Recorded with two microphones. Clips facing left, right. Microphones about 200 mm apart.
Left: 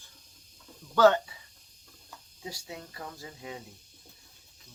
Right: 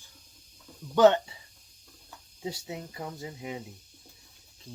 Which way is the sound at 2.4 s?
25° right (ahead or behind).